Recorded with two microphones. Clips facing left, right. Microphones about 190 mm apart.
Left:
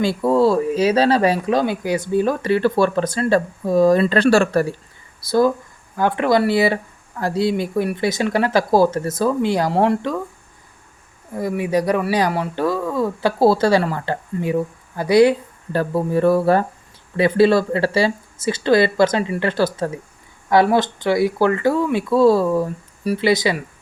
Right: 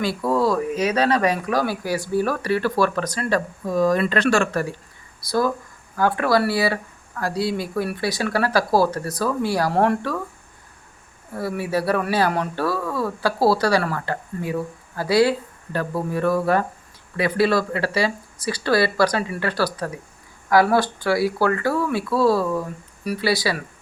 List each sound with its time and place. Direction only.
0.0 s speech: 25° left (ahead or behind)
5.2 s speech: 25° left (ahead or behind)
11.3 s speech: 15° left (ahead or behind)